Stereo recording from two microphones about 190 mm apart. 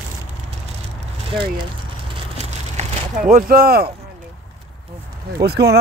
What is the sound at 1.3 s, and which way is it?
Speech, 25° right (ahead or behind).